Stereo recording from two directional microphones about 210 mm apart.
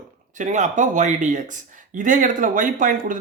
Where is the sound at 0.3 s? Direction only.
35° right (ahead or behind).